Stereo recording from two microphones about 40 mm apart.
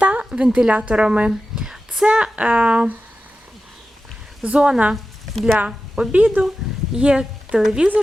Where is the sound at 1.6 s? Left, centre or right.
Centre.